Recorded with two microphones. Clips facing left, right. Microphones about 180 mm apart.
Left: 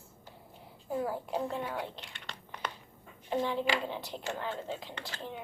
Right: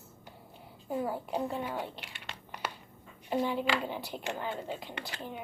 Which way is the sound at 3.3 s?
5° right (ahead or behind).